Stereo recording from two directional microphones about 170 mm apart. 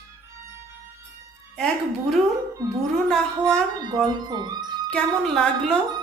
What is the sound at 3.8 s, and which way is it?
Speech, 25° right (ahead or behind).